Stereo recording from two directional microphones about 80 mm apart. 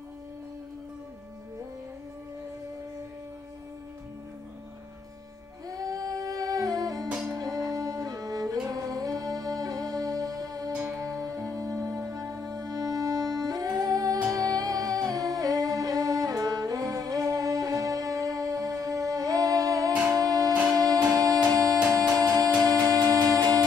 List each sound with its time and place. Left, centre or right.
5.8 s music: right
7.1 s music: centre
7.3 s music: right
10.7 s music: right
11.0 s music: right